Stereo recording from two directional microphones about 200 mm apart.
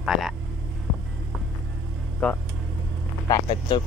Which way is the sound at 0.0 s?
5° right (ahead or behind).